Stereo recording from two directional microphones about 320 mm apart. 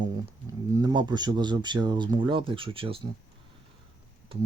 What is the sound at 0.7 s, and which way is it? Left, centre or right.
Speech, centre.